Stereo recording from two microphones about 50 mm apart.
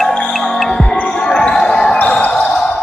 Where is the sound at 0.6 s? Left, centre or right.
Centre.